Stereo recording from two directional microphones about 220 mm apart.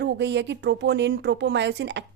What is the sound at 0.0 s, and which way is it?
Speech, 50° right (ahead or behind).